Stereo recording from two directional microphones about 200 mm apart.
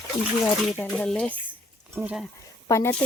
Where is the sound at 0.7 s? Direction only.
5° left (ahead or behind).